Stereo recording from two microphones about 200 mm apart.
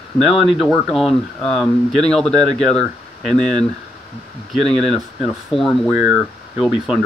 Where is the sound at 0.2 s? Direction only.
Centre (ahead or behind).